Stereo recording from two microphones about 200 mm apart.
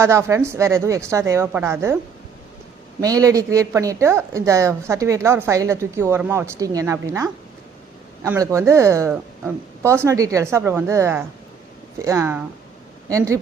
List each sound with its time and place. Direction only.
0.0 s a woman's voice: 15° right (ahead or behind)
3.0 s a woman's voice: 15° right (ahead or behind)